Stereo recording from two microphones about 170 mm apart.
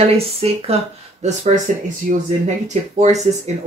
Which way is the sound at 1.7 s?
45° right (ahead or behind).